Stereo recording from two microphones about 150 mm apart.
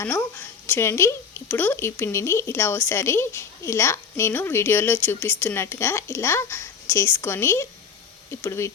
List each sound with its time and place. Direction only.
0.0 s a woman's voice: 15° left (ahead or behind)